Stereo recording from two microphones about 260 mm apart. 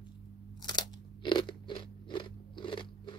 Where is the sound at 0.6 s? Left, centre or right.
Centre.